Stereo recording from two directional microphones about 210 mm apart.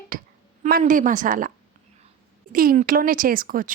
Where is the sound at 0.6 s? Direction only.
40° right (ahead or behind).